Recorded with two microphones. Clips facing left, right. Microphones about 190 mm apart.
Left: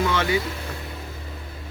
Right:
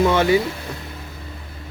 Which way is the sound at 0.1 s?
30° right (ahead or behind).